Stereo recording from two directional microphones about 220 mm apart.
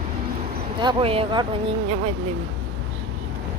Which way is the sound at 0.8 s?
25° right (ahead or behind).